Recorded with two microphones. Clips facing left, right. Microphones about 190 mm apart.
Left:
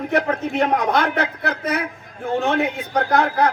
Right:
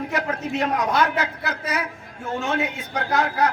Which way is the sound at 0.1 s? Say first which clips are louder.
Left 5 dB; 60° left (ahead or behind).